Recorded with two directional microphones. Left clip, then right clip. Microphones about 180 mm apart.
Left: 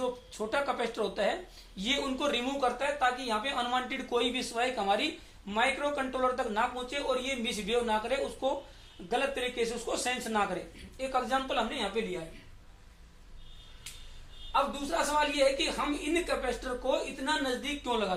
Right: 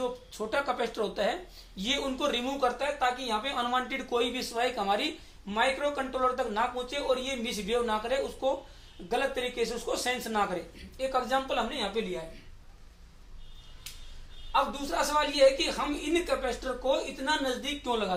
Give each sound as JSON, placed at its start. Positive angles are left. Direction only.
{"t": 0.0, "sound": "speech", "side_deg": 10}
{"t": 14.5, "sound": "speech", "side_deg": 10}